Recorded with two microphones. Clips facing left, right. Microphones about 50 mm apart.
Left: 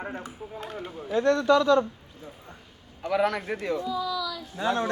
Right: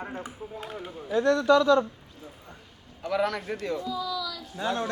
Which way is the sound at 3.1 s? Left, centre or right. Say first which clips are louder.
Left 2 dB; centre.